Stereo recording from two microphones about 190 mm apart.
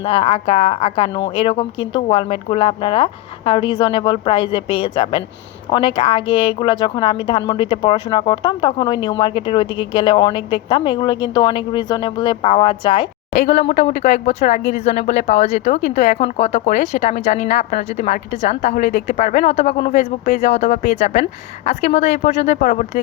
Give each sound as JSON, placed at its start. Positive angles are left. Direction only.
{"t": 0.0, "sound": "a woman's voice", "side_deg": 30}